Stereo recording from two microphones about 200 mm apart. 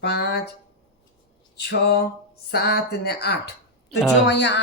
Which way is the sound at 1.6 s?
55° left (ahead or behind).